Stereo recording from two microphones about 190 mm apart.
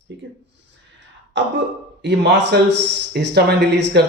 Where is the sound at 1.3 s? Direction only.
75° right (ahead or behind).